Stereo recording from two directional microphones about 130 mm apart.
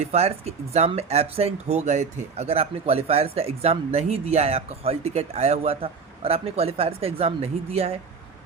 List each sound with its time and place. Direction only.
0.0 s speech: 55° right (ahead or behind)